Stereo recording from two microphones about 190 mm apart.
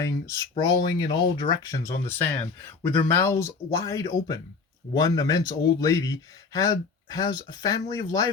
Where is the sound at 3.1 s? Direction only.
15° left (ahead or behind).